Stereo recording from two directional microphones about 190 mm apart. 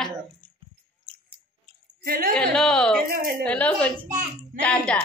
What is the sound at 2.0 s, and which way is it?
Speech, 50° right (ahead or behind).